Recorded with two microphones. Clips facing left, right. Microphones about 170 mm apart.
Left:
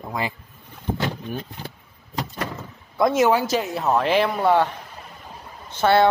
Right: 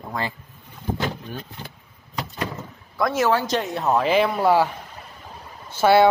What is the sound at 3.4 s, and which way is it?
Speech, 5° left (ahead or behind).